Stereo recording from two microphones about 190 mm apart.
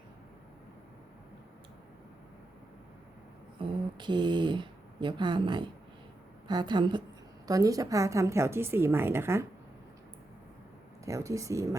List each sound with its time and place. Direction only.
3.6 s a woman's voice: 25° right (ahead or behind)
11.0 s a woman's voice: 15° right (ahead or behind)